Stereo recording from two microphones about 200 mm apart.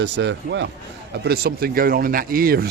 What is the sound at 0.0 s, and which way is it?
Speech, 65° right (ahead or behind).